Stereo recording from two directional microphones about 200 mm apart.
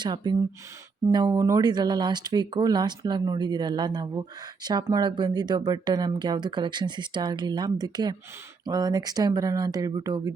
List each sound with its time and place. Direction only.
0.0 s speech: 20° right (ahead or behind)